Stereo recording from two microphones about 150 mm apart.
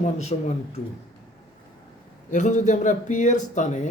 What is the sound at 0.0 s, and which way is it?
Speech, 50° left (ahead or behind).